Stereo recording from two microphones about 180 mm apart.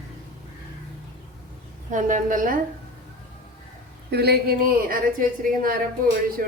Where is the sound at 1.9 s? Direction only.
45° right (ahead or behind).